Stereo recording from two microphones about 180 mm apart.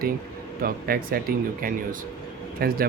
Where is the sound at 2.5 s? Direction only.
55° right (ahead or behind).